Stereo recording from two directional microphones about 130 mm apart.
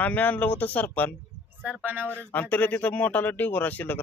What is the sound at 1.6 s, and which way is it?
Speech, 10° right (ahead or behind).